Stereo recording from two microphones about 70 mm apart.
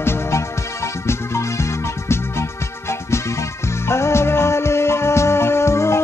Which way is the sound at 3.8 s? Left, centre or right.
Left.